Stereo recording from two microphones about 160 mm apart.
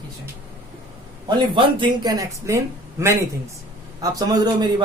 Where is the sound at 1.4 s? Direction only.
30° right (ahead or behind).